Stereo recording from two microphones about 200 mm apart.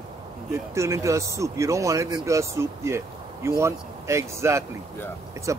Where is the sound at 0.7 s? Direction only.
15° right (ahead or behind).